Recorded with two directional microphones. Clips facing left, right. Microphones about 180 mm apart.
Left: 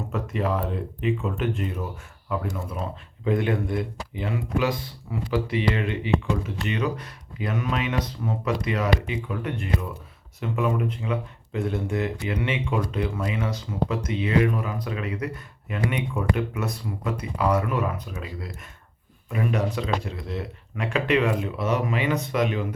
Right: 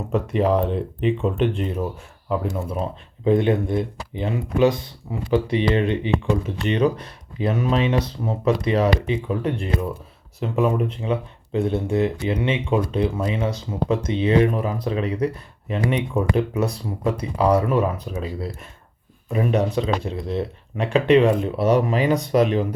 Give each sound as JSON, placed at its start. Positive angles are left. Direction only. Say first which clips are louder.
{"t": 0.1, "sound": "speech", "louder": "right 8 dB", "side_deg": -30}